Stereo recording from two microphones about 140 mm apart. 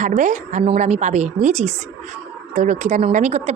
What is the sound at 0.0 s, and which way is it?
A woman's voice, 60° right (ahead or behind).